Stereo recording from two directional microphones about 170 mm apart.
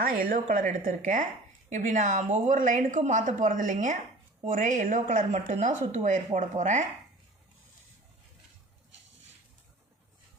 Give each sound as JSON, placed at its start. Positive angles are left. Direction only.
{"t": 0.0, "sound": "speech", "side_deg": -55}